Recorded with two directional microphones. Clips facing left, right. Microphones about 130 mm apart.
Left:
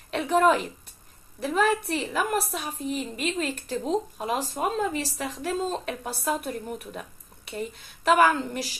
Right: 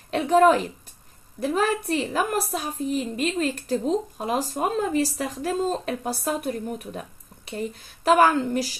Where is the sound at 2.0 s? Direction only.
40° right (ahead or behind).